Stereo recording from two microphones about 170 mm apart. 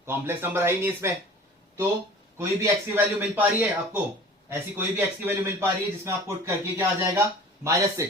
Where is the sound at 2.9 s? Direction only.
10° right (ahead or behind).